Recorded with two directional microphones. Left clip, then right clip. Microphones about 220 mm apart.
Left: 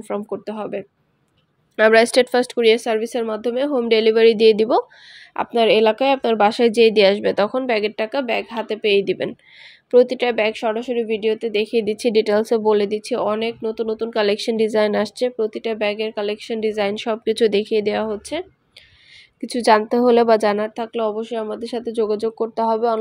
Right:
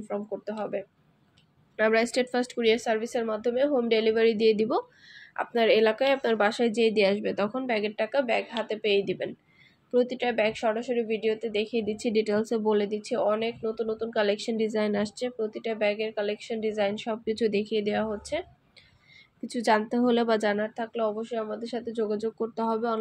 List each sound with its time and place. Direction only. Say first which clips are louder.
0.1 s a woman's voice: left 7 dB; 45° left (ahead or behind)
6.6 s a woman's voice: left 10 dB; 50° left (ahead or behind)
19.4 s a woman's voice: left 9 dB; 45° left (ahead or behind)